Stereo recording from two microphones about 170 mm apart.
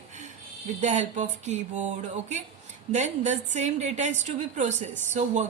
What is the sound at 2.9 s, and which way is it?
A woman's voice, 45° right (ahead or behind).